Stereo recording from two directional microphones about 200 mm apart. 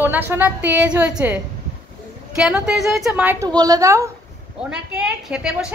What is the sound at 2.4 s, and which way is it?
A woman's voice, centre (ahead or behind).